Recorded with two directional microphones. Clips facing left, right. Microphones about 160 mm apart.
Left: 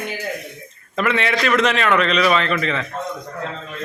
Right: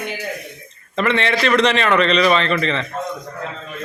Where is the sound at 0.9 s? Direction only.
5° left (ahead or behind).